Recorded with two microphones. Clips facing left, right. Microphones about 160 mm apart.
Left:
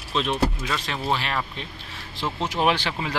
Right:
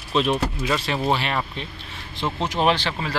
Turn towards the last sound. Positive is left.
turn(degrees=15)  # may be behind; listen again after turning